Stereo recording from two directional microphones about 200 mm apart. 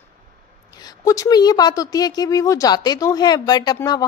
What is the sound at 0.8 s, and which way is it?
Speech, 15° left (ahead or behind).